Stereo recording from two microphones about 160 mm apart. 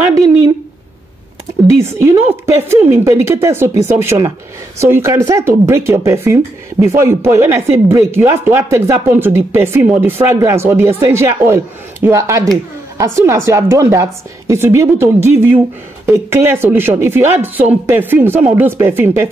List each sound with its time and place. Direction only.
1.8 s speech: 15° right (ahead or behind)